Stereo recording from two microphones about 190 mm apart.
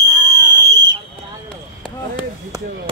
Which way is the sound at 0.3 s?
70° right (ahead or behind).